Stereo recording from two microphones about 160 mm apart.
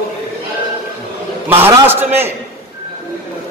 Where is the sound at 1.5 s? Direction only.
15° right (ahead or behind).